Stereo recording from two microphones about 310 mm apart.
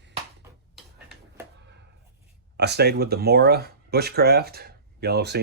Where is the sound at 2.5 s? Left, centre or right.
Right.